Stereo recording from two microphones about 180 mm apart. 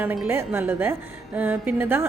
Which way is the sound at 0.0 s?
10° right (ahead or behind).